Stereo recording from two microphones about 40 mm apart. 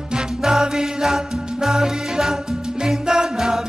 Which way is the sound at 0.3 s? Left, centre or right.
Centre.